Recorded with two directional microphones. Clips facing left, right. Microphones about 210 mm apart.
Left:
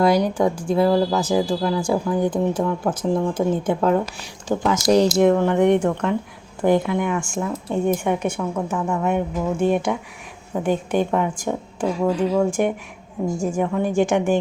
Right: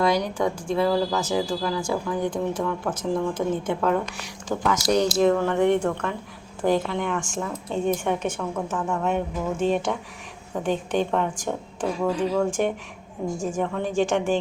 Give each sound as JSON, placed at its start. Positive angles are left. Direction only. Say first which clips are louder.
{"t": 0.3, "sound": "a woman's voice", "louder": "left 5 dB", "side_deg": 30}